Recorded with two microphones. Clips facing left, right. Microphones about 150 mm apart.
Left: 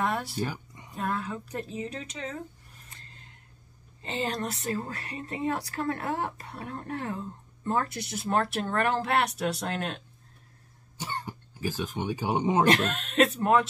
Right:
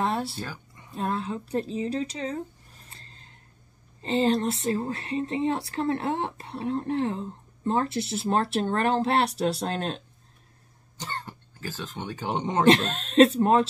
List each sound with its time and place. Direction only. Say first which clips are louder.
0.0 s a sound: right 2 dB; 30° right (ahead or behind)
0.4 s speech: left 5 dB; 15° left (ahead or behind)
0.9 s a woman's voice: right 3 dB; 25° right (ahead or behind)
2.9 s a sound: right 1 dB; 30° right (ahead or behind)
4.0 s speech: right 8 dB; 30° right (ahead or behind)
11.0 s speech: left 1 dB; 10° left (ahead or behind)
12.6 s speech: right 4 dB; 30° right (ahead or behind)